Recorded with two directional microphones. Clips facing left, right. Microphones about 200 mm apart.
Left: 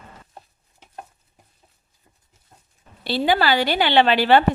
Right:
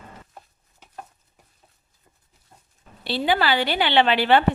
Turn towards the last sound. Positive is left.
turn(degrees=40)  # may be behind; listen again after turning